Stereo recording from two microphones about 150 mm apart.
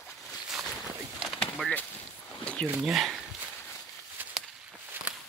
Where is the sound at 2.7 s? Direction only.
5° right (ahead or behind).